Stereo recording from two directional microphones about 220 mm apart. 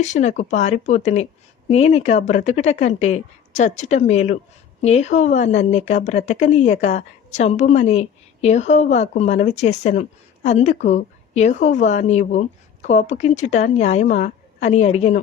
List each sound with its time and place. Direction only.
0.0 s speech: 30° left (ahead or behind)